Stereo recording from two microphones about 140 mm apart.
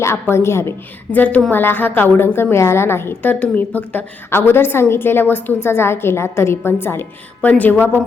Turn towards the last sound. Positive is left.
turn(degrees=10)  # may be behind; listen again after turning